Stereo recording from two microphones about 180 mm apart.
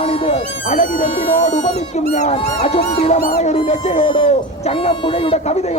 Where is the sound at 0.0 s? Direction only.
35° left (ahead or behind).